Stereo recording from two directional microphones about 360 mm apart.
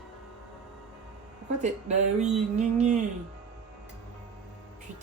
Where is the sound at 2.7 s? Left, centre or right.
Centre.